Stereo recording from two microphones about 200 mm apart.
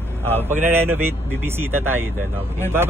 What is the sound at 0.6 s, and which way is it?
Speech, 10° right (ahead or behind).